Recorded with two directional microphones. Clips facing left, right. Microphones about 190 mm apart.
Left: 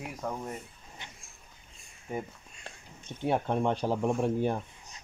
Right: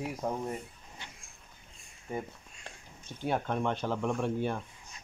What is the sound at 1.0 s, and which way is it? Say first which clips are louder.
Vehicle: left 1 dB; 20° left (ahead or behind).